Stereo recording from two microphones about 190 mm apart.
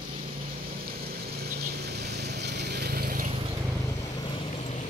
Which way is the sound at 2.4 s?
60° right (ahead or behind).